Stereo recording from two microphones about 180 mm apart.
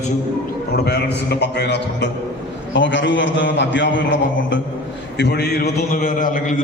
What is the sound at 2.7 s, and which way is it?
A man's voice, 90° left.